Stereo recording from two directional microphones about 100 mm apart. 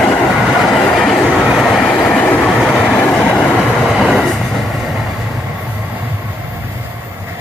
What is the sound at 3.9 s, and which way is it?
Train, centre (ahead or behind).